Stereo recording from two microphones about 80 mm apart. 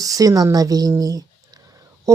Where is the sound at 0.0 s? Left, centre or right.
Right.